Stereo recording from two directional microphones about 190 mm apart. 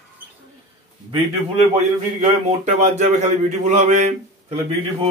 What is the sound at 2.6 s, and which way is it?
Speech, 35° right (ahead or behind).